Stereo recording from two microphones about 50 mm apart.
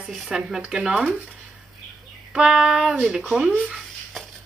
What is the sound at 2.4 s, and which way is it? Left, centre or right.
Speech, centre.